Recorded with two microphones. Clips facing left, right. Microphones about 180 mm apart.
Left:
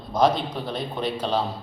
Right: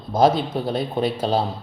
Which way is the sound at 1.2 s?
35° right (ahead or behind).